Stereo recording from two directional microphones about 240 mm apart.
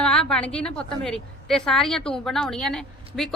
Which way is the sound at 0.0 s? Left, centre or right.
Centre.